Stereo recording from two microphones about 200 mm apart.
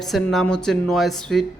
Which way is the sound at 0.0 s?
Centre (ahead or behind).